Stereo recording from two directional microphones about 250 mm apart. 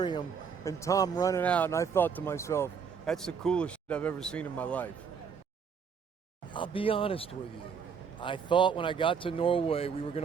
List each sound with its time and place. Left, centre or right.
0.0 s a man's voice: centre
6.5 s speech: left